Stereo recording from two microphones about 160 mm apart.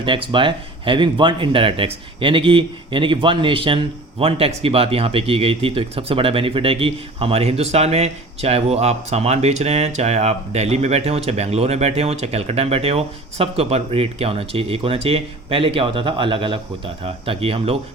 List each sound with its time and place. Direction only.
0.0 s speech: 30° right (ahead or behind)